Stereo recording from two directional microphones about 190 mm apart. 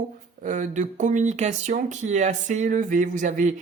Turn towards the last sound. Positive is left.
turn(degrees=-40)  # may be behind; listen again after turning